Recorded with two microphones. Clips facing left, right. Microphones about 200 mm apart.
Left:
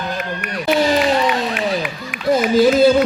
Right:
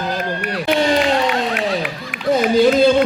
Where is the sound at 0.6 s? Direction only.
Centre (ahead or behind).